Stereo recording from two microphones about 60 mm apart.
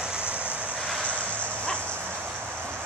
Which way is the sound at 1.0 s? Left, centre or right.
Left.